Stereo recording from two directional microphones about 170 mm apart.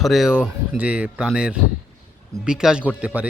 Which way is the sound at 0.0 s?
Centre (ahead or behind).